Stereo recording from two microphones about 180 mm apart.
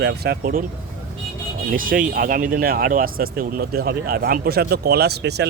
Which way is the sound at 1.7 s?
50° right (ahead or behind).